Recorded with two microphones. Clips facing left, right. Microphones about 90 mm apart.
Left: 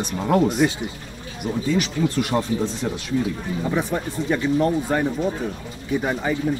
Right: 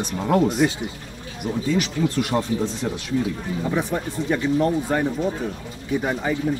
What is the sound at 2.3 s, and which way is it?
Speech, 25° left (ahead or behind).